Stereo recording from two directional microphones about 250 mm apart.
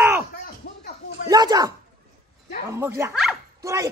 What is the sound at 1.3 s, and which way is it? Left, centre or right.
Speech, centre.